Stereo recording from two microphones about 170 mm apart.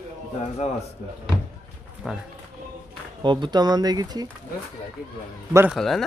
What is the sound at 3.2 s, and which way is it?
Speech, 25° right (ahead or behind).